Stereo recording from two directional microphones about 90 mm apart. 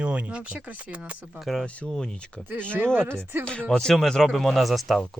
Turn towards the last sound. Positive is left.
turn(degrees=0)  # may be behind; listen again after turning